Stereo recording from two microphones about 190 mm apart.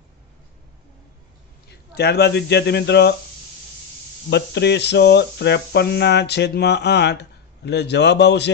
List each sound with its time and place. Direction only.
2.0 s speech: 60° left (ahead or behind)
4.3 s speech: 60° left (ahead or behind)